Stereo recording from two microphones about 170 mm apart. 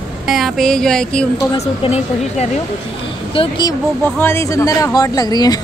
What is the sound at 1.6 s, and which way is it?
Speech, 40° left (ahead or behind).